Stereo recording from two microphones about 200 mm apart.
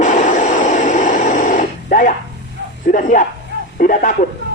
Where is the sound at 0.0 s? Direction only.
35° left (ahead or behind).